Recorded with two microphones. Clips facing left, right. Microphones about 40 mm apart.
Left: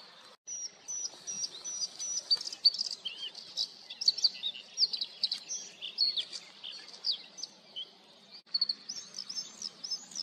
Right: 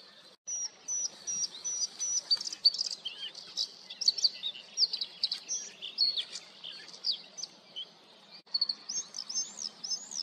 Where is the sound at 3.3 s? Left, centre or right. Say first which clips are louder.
Even; centre.